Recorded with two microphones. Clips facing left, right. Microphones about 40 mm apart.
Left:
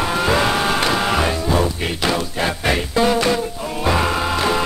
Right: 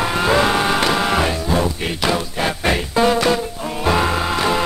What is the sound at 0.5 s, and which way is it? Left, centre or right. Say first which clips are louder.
Music: right 1 dB; centre.